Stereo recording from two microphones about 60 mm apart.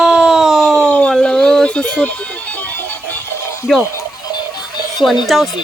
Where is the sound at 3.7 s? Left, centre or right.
Centre.